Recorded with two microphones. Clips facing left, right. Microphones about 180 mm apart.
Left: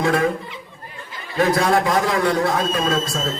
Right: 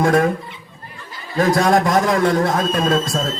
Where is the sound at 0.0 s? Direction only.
45° right (ahead or behind).